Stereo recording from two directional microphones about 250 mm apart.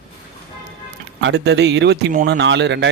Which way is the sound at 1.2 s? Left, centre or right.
Right.